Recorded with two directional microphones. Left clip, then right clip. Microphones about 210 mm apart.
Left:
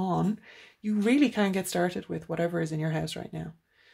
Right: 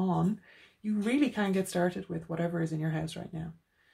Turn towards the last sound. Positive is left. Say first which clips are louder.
# left 4 dB
turn(degrees=45)  # may be behind; listen again after turning